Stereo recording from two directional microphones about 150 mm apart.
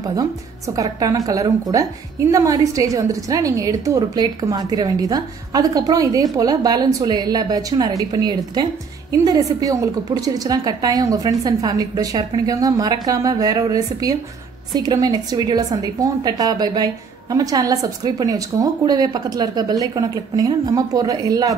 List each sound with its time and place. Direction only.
0.7 s a woman's voice: 25° right (ahead or behind)